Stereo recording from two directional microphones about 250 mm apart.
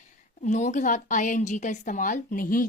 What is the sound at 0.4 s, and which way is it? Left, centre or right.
A woman's voice, left.